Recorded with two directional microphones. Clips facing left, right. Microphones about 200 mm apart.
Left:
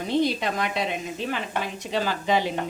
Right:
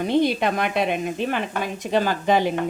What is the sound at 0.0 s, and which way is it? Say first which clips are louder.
A woman's voice: right 4 dB; 55° right (ahead or behind).